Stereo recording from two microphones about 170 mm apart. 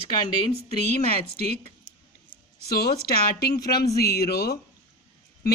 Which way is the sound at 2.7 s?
65° left (ahead or behind).